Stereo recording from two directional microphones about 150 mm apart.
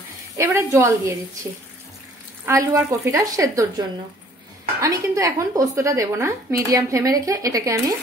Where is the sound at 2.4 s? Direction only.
20° right (ahead or behind).